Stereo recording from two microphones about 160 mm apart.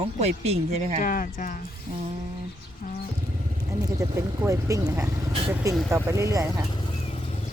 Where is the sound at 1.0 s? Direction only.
55° left (ahead or behind).